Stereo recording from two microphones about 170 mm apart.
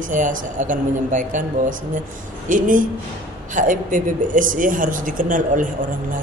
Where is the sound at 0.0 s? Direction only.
50° right (ahead or behind).